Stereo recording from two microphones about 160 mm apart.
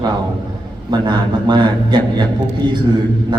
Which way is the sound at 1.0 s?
25° right (ahead or behind).